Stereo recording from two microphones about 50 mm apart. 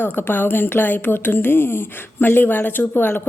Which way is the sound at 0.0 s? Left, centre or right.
Left.